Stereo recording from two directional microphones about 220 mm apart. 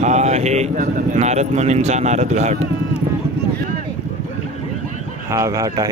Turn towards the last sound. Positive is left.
turn(degrees=-15)  # may be behind; listen again after turning